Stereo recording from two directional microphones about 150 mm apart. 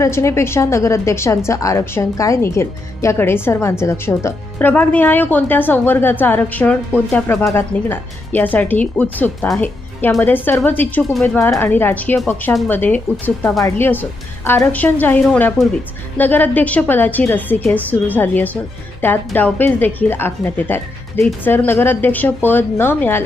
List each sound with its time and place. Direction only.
0.0 s a woman's voice: 20° left (ahead or behind)